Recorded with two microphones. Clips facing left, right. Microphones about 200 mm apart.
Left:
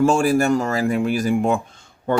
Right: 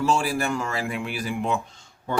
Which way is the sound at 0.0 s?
50° left (ahead or behind).